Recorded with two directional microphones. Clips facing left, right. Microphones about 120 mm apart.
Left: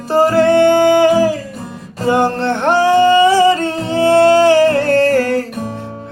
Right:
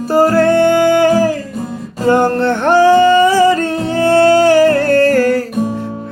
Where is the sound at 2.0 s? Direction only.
15° left (ahead or behind).